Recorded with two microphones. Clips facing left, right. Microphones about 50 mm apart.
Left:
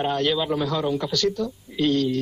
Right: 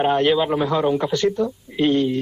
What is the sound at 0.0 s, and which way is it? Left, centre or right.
Speech, right.